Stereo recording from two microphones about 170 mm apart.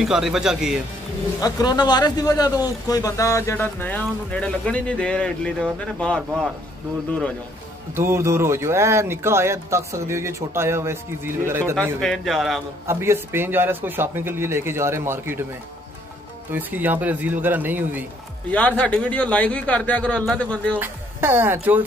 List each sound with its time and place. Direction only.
0.0 s a man's voice: centre (ahead or behind)
1.4 s speech: 25° left (ahead or behind); by 7.3 s 5° left (ahead or behind)
7.9 s speech: 15° right (ahead or behind)
12.0 s a man's voice: 5° left (ahead or behind)
12.8 s speech: 15° right (ahead or behind)
16.5 s speech: 10° right (ahead or behind)
18.5 s speech: 10° left (ahead or behind)
20.8 s speech: 10° right (ahead or behind)